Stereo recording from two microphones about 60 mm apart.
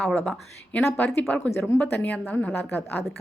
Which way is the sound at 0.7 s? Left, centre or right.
Left.